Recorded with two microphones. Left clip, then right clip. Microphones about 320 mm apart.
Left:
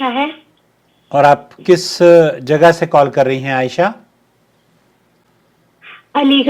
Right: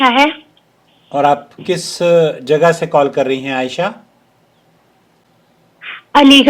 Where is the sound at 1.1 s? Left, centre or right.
Left.